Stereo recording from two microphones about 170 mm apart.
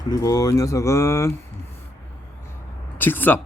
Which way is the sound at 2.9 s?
10° left (ahead or behind).